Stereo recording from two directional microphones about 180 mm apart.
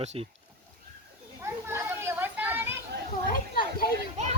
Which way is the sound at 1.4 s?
15° right (ahead or behind).